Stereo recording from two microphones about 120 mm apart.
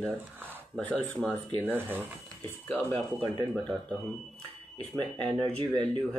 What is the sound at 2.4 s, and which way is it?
Speech, 15° left (ahead or behind).